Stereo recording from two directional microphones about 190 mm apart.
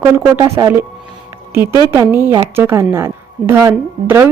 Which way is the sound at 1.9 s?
10° right (ahead or behind).